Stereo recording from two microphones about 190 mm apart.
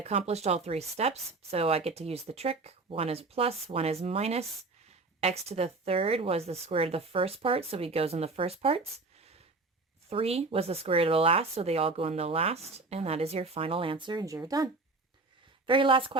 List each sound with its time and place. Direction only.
0.0 s speech: 35° right (ahead or behind)
10.1 s speech: 30° right (ahead or behind)